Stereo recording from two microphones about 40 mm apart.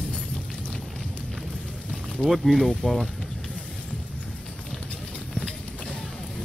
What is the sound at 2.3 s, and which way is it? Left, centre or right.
Speech, centre.